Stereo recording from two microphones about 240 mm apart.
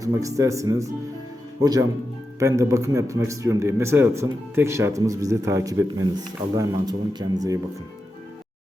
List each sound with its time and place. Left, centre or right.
0.0 s a man's voice: centre